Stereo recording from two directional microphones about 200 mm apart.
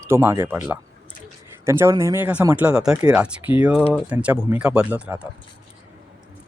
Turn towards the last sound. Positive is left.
turn(degrees=-5)  # may be behind; listen again after turning